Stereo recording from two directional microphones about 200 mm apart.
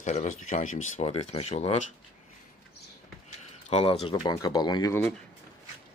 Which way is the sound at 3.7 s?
30° left (ahead or behind).